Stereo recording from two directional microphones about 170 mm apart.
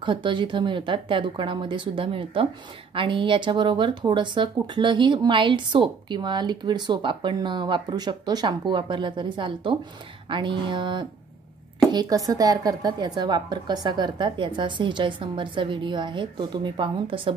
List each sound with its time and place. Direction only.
0.0 s speech: 30° right (ahead or behind)